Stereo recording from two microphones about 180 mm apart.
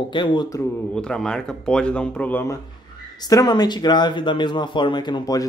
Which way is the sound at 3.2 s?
20° left (ahead or behind).